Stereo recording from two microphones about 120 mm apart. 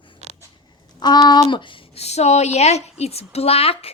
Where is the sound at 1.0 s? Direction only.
35° left (ahead or behind).